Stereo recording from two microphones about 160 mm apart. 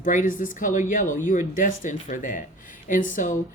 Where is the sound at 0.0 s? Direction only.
55° left (ahead or behind).